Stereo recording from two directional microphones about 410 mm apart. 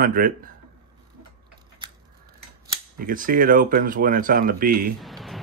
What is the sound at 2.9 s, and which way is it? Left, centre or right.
Speech, centre.